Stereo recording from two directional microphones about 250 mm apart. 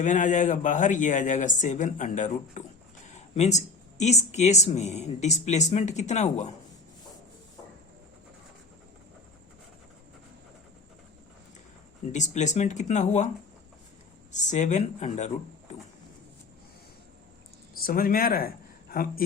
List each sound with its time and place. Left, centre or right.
0.0 s speech: left
3.1 s a sound: left
4.0 s speech: left
12.1 s speech: left
14.3 s speech: left
17.7 s speech: left